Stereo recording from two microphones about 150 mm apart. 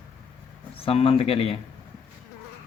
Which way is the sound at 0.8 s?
40° left (ahead or behind).